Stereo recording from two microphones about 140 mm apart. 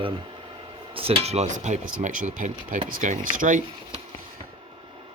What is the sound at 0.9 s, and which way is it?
Speech, 45° right (ahead or behind).